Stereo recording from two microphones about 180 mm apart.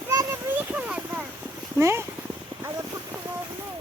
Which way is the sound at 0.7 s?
5° right (ahead or behind).